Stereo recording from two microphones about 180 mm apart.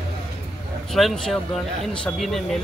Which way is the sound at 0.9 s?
Centre (ahead or behind).